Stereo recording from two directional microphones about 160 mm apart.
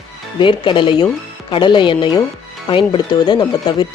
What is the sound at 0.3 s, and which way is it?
Speech, 30° left (ahead or behind).